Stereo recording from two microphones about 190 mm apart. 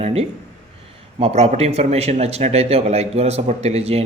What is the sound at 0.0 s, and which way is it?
A man's voice, 35° right (ahead or behind).